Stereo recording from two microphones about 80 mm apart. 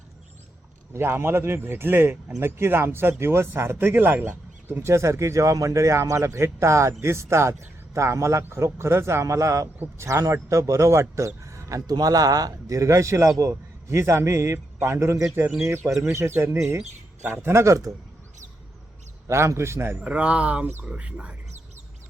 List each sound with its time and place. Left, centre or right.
0.9 s a man's voice: right
19.3 s speech: right
20.0 s speech: centre